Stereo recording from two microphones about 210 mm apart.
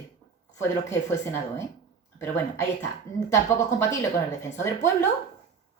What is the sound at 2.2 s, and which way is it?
A woman's voice, 10° left (ahead or behind).